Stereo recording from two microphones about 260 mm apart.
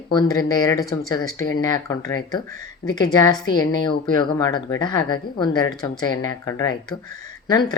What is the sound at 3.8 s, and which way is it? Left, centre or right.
Speech, centre.